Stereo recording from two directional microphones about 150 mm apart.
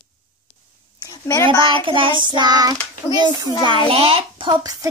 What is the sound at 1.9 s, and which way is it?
A child's voice, 35° right (ahead or behind).